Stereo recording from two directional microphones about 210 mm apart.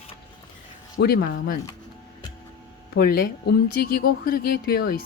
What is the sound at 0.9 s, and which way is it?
Speech, 45° left (ahead or behind).